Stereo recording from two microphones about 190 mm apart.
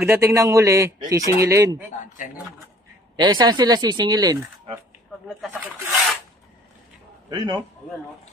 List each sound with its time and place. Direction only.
0.0 s a man's voice: 15° right (ahead or behind)
3.2 s speech: 20° right (ahead or behind)
7.2 s speech: 25° right (ahead or behind)